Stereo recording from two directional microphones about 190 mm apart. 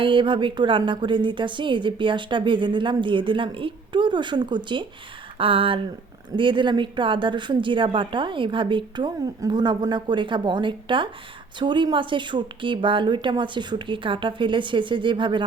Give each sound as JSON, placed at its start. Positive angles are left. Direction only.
{"t": 0.0, "sound": "a woman's voice", "side_deg": -25}